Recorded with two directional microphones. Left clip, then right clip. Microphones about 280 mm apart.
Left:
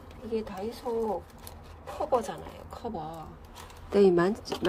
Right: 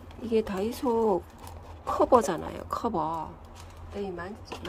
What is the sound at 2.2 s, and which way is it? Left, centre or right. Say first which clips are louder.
Speech: right 7 dB; centre.